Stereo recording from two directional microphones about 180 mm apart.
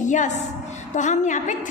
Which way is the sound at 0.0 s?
45° left (ahead or behind).